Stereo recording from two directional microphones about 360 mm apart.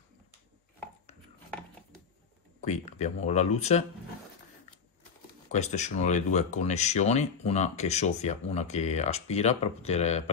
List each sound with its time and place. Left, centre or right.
2.6 s speech: centre
5.5 s speech: centre